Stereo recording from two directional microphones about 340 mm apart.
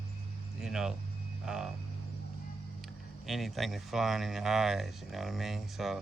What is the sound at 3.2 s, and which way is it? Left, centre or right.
Speech, centre.